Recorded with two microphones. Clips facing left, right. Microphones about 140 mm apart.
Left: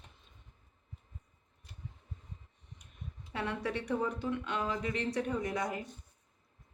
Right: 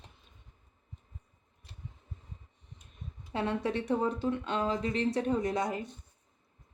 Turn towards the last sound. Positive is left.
turn(degrees=-25)  # may be behind; listen again after turning